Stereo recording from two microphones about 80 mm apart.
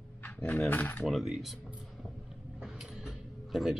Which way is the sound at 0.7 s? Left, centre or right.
Left.